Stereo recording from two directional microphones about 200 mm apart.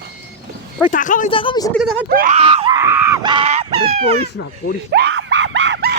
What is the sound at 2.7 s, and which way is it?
Screaming, 10° right (ahead or behind).